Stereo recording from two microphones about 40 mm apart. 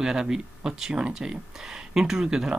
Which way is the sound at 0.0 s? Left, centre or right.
Centre.